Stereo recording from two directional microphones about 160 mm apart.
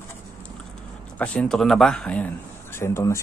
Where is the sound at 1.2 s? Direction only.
5° left (ahead or behind).